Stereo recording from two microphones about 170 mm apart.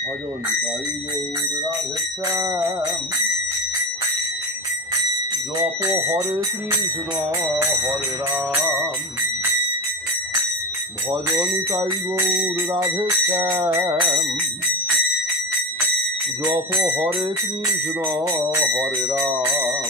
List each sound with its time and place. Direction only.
2.2 s music: 20° right (ahead or behind)
5.8 s music: 15° right (ahead or behind)
11.7 s music: 20° right (ahead or behind)
16.4 s music: 10° right (ahead or behind)
18.3 s music: 15° right (ahead or behind)